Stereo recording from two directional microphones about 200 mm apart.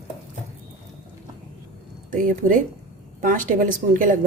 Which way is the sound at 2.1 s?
40° right (ahead or behind).